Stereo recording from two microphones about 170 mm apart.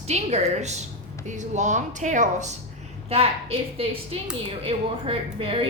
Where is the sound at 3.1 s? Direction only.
35° right (ahead or behind).